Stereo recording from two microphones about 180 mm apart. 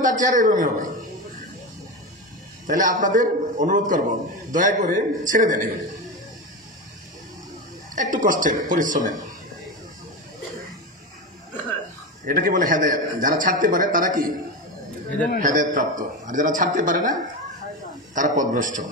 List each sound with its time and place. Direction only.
0.0 s a man's voice: 45° right (ahead or behind)
2.6 s a man's voice: 45° right (ahead or behind)
7.9 s a man's voice: 45° right (ahead or behind)
12.3 s a man's voice: 50° right (ahead or behind)
15.4 s a man's voice: 45° right (ahead or behind)